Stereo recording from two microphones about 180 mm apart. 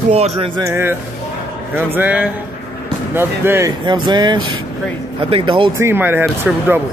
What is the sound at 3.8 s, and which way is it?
Speech, 25° right (ahead or behind).